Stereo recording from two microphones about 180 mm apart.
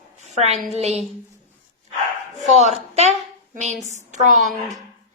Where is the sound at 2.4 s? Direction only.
40° right (ahead or behind).